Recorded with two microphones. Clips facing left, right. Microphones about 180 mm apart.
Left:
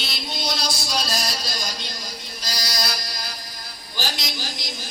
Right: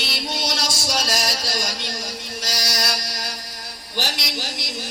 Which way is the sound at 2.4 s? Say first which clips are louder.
Right 2 dB; 75° right (ahead or behind).